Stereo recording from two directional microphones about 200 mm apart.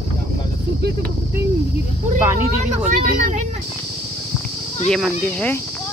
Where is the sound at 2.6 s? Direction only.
40° right (ahead or behind).